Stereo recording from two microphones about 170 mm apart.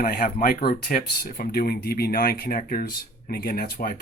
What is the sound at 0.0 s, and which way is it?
Speech, 55° left (ahead or behind).